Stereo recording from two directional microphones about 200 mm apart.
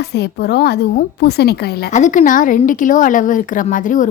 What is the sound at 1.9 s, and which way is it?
A woman's voice, 40° left (ahead or behind).